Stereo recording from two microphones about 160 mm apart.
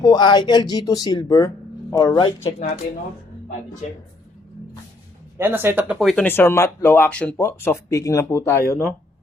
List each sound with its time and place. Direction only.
0.0 s speech: 25° left (ahead or behind)
5.4 s speech: 15° right (ahead or behind)
6.0 s speech: centre (ahead or behind)
6.2 s speech: 15° left (ahead or behind)